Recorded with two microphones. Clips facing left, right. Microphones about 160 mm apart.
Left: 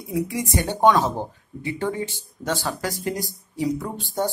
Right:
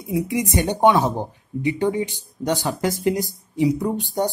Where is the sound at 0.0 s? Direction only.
20° right (ahead or behind).